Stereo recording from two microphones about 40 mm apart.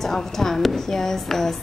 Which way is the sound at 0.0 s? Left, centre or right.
Centre.